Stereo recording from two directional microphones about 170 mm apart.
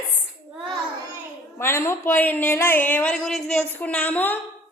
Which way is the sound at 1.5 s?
15° left (ahead or behind).